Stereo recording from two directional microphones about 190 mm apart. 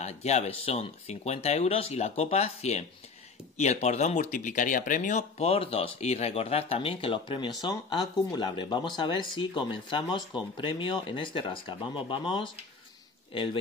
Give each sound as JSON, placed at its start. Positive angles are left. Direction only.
{"t": 0.0, "sound": "speech", "side_deg": 35}